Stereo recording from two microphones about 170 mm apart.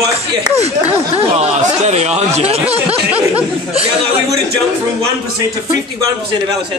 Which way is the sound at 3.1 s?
10° right (ahead or behind).